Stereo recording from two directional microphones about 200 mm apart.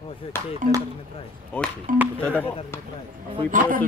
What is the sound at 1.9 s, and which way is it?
Speech, 40° right (ahead or behind).